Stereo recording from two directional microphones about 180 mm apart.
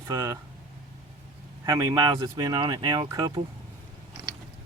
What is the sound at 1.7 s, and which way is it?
Speech, 20° right (ahead or behind).